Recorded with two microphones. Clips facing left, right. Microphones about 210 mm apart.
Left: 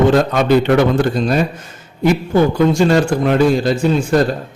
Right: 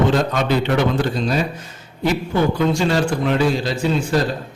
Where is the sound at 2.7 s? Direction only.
45° left (ahead or behind).